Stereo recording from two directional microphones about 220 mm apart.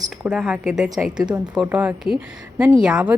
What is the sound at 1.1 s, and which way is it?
Speech, 20° right (ahead or behind).